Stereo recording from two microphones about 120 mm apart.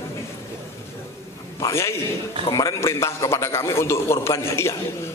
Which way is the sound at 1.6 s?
25° left (ahead or behind).